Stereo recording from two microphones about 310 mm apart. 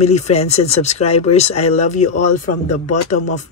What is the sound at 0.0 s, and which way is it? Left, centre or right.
Speech, left.